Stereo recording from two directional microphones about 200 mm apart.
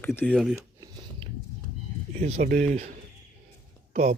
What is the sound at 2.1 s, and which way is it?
Speech, 35° right (ahead or behind).